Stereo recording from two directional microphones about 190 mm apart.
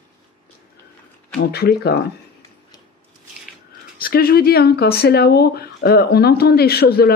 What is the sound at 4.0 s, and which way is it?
Speech, 50° left (ahead or behind).